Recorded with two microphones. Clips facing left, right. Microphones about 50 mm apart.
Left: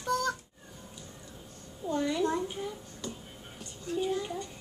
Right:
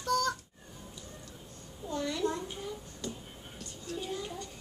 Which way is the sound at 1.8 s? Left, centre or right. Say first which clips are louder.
Left 3 dB; centre.